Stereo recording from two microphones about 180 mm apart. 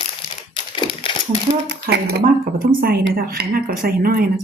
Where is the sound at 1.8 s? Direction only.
60° right (ahead or behind).